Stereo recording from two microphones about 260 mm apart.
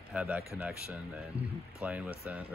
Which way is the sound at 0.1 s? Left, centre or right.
Centre.